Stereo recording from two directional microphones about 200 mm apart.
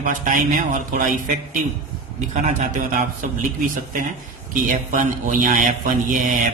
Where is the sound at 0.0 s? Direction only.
40° right (ahead or behind).